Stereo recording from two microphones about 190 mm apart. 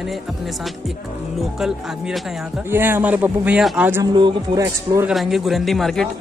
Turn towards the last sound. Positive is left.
turn(degrees=0)  # may be behind; listen again after turning